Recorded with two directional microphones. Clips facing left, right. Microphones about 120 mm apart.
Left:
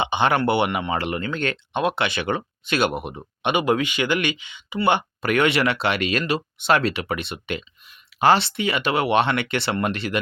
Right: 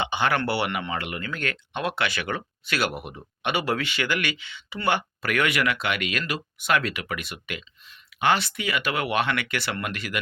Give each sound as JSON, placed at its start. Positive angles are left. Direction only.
{"t": 0.0, "sound": "speech", "side_deg": 20}
{"t": 0.9, "sound": "speech", "side_deg": 35}